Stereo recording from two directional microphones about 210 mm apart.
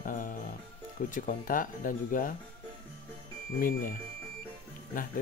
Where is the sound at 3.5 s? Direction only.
40° left (ahead or behind).